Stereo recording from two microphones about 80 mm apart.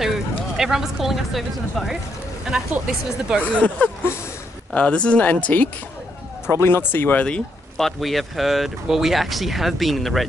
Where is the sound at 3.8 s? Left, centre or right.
Centre.